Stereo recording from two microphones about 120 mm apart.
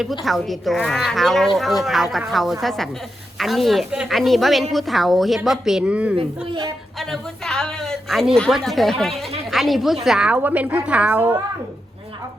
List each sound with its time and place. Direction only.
0.0 s a woman's voice: centre (ahead or behind)
6.1 s speech: 40° right (ahead or behind)
7.0 s a woman's voice: 5° left (ahead or behind); by 11.3 s 15° right (ahead or behind)